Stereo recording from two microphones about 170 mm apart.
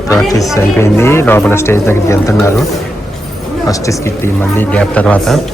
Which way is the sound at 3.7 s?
20° left (ahead or behind).